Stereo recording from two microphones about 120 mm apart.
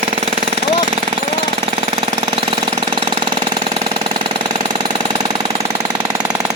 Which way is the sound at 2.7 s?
40° right (ahead or behind).